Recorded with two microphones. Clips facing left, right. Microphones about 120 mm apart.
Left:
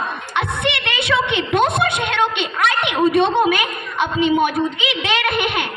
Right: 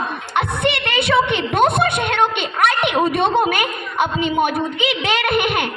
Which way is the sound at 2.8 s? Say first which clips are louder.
Left 1 dB; 50° right (ahead or behind).